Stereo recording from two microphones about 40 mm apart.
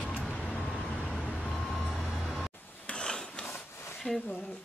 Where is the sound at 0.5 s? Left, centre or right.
Left.